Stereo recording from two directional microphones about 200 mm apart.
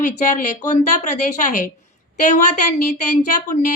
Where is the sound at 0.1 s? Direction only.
40° left (ahead or behind).